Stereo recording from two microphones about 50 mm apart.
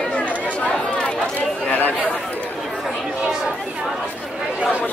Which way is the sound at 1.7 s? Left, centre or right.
Left.